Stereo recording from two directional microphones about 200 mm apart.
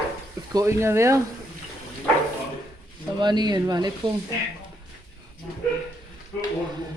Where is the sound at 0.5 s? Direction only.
15° right (ahead or behind).